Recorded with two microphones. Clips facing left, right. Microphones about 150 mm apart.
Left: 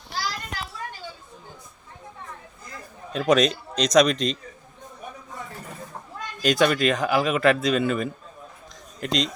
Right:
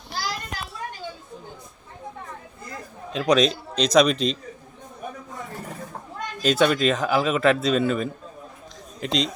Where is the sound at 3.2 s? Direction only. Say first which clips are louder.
Even; centre (ahead or behind).